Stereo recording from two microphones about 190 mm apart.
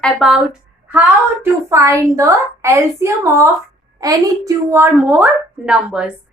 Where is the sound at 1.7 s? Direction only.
15° right (ahead or behind).